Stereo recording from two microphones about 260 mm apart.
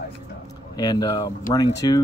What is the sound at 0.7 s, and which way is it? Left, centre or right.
Speech, centre.